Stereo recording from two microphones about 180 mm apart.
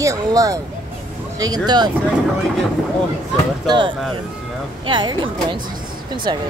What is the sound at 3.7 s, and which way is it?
Speech, 25° right (ahead or behind).